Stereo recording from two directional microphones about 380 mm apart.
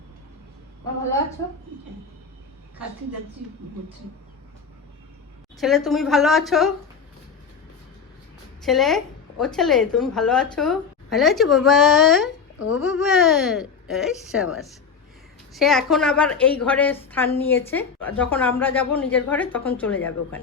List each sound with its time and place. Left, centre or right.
5.5 s a woman's voice: centre
8.6 s a woman's voice: centre
12.5 s speech: left
12.8 s a woman's voice: centre